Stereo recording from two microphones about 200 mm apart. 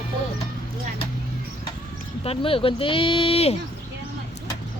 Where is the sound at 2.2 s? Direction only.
25° left (ahead or behind).